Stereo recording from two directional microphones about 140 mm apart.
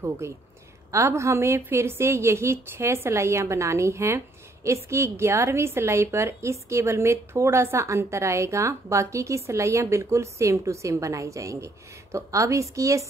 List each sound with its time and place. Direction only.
0.2 s a woman's voice: 20° right (ahead or behind)